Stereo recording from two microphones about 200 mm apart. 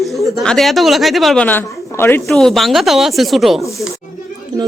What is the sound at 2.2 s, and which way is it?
Speech, centre (ahead or behind).